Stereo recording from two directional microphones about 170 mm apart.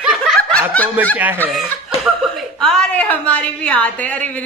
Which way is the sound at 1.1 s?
10° right (ahead or behind).